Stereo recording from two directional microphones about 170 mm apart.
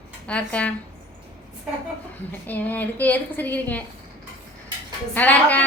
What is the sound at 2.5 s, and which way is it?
A woman's voice, 10° left (ahead or behind).